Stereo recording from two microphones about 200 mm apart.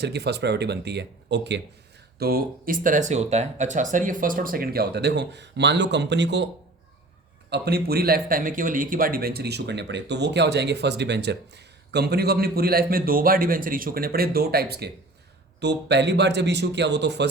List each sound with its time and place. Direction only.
0.0 s speech: 55° right (ahead or behind)
7.5 s speech: 55° right (ahead or behind)